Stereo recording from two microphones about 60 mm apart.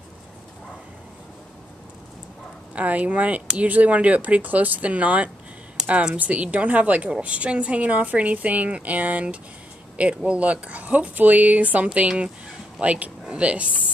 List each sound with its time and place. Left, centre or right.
2.7 s speech: right